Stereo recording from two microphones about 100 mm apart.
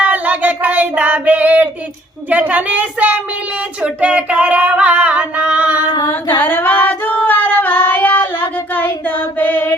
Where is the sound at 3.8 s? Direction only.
10° right (ahead or behind).